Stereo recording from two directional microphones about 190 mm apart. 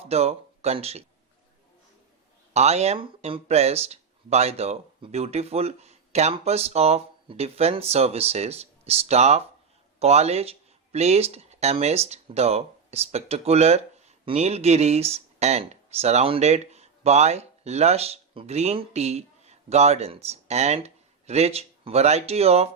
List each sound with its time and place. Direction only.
0.0 s speech: 35° right (ahead or behind)
2.5 s speech: 35° right (ahead or behind)